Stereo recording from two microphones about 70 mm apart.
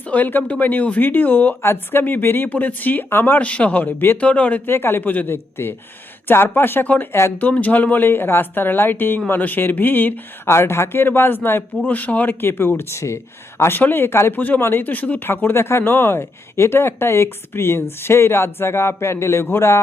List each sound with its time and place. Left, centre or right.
0.1 s speech: left
3.4 s speech: centre
7.1 s speech: left
7.3 s speech: left
13.6 s speech: left